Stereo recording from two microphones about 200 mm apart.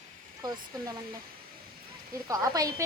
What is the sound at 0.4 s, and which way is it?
Speech, 20° right (ahead or behind).